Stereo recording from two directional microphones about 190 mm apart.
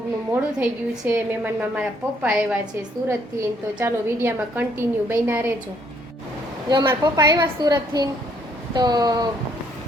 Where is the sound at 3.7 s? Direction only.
10° right (ahead or behind).